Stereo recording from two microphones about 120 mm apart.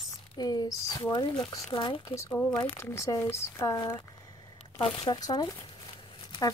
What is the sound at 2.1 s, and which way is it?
Speech, 25° left (ahead or behind).